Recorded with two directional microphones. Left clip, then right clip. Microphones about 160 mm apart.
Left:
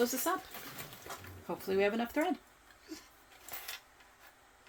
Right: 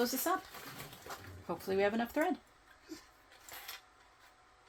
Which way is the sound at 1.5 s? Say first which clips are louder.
Left 1 dB; 20° right (ahead or behind).